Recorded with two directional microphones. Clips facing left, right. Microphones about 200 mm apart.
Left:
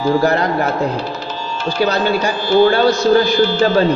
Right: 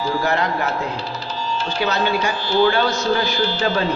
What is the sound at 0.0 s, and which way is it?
Speech, 40° left (ahead or behind).